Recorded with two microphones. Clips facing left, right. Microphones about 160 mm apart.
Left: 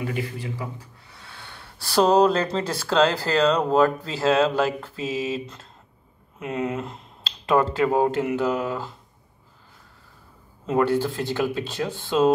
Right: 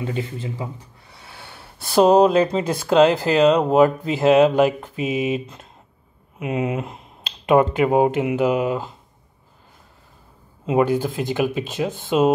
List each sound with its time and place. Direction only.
0.0 s speech: 25° right (ahead or behind)
1.2 s a sound: 20° right (ahead or behind)
2.0 s speech: 10° right (ahead or behind)
6.4 s speech: 10° right (ahead or behind)
10.8 s speech: 15° right (ahead or behind)